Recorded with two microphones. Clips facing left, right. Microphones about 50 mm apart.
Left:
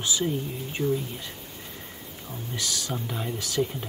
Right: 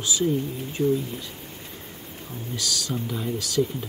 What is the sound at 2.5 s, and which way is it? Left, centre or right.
Speech, left.